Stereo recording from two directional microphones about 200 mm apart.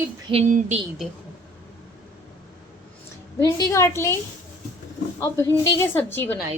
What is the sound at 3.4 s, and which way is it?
Speech, 15° left (ahead or behind).